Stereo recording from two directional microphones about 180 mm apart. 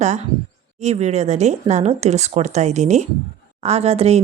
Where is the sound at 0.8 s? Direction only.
40° right (ahead or behind).